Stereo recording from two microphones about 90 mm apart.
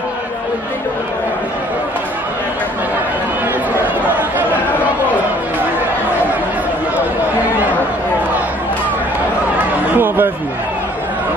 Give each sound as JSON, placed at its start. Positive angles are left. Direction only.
{"t": 3.8, "sound": "chatter", "side_deg": -20}
{"t": 9.9, "sound": "chatter", "side_deg": -20}